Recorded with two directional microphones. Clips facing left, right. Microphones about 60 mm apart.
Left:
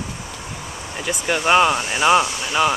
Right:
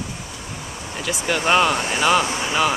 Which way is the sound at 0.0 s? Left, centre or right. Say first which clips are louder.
Left 1 dB; centre.